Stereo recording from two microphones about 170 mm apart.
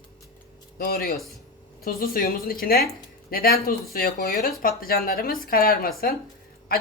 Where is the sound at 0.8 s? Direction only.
60° left (ahead or behind).